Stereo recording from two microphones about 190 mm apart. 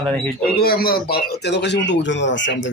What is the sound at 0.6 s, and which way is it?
Speech, 50° left (ahead or behind).